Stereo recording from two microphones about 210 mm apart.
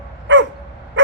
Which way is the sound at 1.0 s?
65° right (ahead or behind).